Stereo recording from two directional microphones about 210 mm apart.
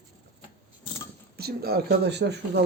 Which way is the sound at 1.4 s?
50° right (ahead or behind).